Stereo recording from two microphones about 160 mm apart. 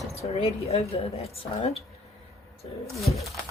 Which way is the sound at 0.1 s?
40° left (ahead or behind).